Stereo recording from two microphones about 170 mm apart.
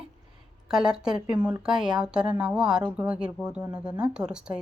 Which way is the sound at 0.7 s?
5° right (ahead or behind).